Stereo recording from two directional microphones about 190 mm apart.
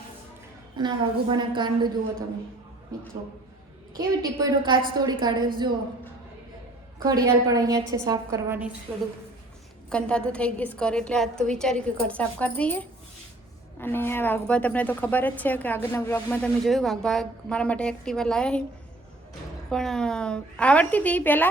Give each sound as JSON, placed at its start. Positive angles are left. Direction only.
{"t": 0.8, "sound": "a woman's voice", "side_deg": -25}
{"t": 4.4, "sound": "a woman's voice", "side_deg": -20}
{"t": 7.0, "sound": "a woman's voice", "side_deg": -20}
{"t": 9.9, "sound": "a woman's voice", "side_deg": 5}
{"t": 19.7, "sound": "a woman's voice", "side_deg": 0}